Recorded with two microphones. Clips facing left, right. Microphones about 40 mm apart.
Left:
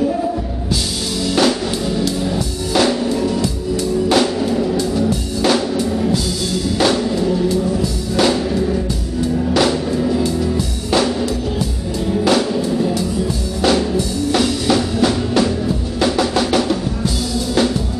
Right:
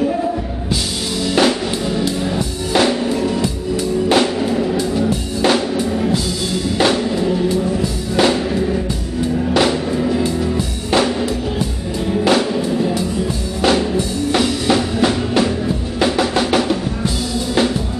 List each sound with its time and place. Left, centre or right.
1.4 s drum kit: right
2.0 s music: right
4.1 s drum kit: right
6.8 s music: right
12.1 s music: right
14.4 s drum: right
16.0 s music: right